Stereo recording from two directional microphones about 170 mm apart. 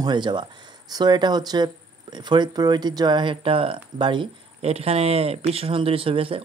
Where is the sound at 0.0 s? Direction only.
25° right (ahead or behind).